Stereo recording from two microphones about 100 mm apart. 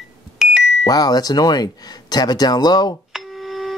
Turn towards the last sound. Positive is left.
turn(degrees=0)  # may be behind; listen again after turning